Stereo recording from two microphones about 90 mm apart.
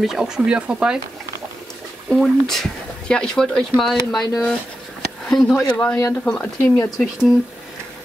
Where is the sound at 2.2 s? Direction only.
Centre (ahead or behind).